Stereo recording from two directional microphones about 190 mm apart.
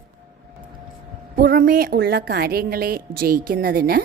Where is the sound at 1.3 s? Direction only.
50° right (ahead or behind).